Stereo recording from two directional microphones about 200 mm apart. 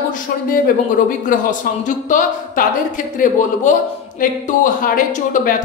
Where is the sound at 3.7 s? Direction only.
40° left (ahead or behind).